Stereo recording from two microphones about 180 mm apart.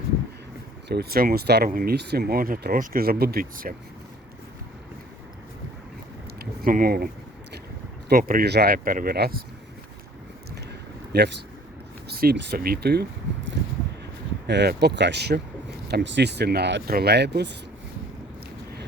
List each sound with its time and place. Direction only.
0.9 s speech: 60° right (ahead or behind)
6.4 s speech: 55° right (ahead or behind)
8.1 s speech: 55° right (ahead or behind)
11.1 s speech: 65° right (ahead or behind)
14.4 s speech: 70° right (ahead or behind)